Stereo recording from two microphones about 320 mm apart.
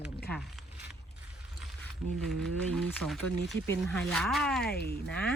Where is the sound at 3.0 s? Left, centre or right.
Right.